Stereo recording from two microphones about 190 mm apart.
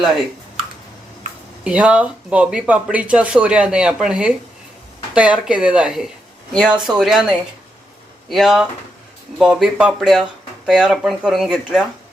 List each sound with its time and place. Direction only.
1.6 s speech: 5° right (ahead or behind)
8.3 s speech: centre (ahead or behind)